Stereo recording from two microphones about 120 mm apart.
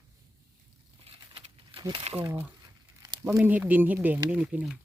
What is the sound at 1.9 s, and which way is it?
Speech, 60° right (ahead or behind).